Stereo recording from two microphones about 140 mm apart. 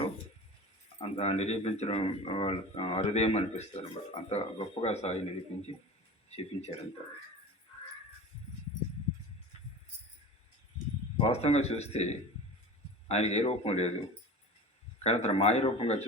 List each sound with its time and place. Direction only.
1.0 s speech: 45° left (ahead or behind)
6.3 s speech: 45° left (ahead or behind)
11.2 s speech: 50° left (ahead or behind)
14.9 s speech: 50° left (ahead or behind)